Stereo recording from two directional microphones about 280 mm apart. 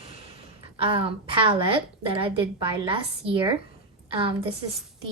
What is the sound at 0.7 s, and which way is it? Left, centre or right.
A woman's voice, centre.